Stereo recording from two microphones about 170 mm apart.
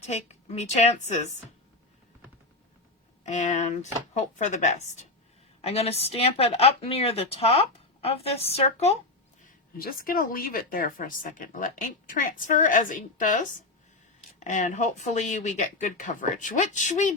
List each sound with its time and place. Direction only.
0.0 s a woman's voice: 40° left (ahead or behind)
3.2 s a woman's voice: 45° left (ahead or behind)
9.7 s speech: 55° left (ahead or behind)